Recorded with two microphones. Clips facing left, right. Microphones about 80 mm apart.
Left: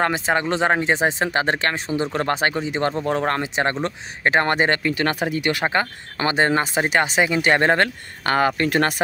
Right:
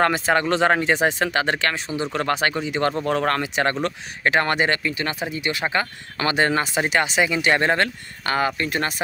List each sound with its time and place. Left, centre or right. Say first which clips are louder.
0.0 s speech: right 1 dB; centre; by 4.9 s left
4.9 s speech: left 5 dB; left
5.7 s speech: left 2 dB; left
8.6 s speech: left 5 dB; left